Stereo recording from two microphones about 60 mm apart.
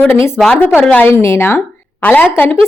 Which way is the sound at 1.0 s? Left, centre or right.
Left.